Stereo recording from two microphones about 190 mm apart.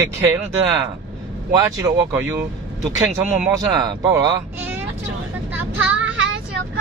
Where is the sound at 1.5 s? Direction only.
15° right (ahead or behind).